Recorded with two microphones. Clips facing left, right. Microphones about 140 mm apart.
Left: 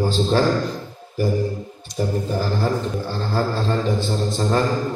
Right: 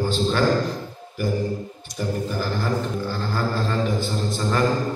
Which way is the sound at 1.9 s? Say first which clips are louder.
Left 3 dB; 30° left (ahead or behind).